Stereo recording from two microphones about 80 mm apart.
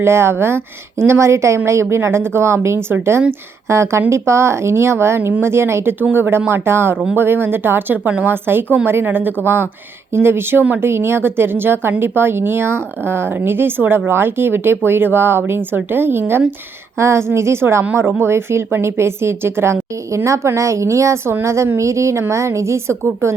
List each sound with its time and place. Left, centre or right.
0.0 s a woman's voice: right